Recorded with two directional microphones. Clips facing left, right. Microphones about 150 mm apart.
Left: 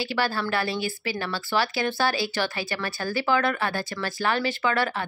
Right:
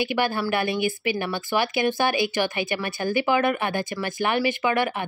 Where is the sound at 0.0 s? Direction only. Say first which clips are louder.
Right 3 dB; 15° right (ahead or behind).